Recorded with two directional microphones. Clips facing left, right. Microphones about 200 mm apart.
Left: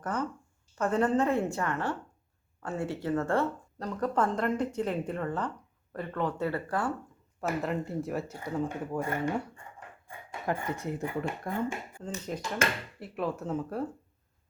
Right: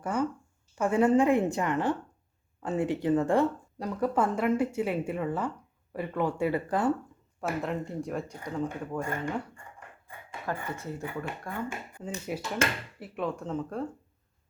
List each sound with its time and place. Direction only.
0.0 s speech: 10° right (ahead or behind)
7.4 s speech: centre (ahead or behind); by 11.6 s 20° left (ahead or behind)
12.0 s speech: 10° right (ahead or behind)